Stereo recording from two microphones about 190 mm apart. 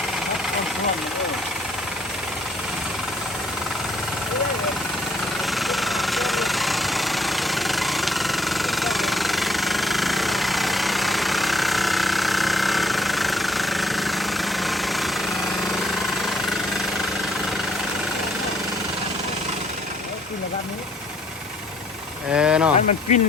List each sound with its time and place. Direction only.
5.5 s engine: centre (ahead or behind)
16.0 s jackhammer: centre (ahead or behind)
22.3 s a sound: 5° right (ahead or behind)
22.9 s speech: 35° left (ahead or behind)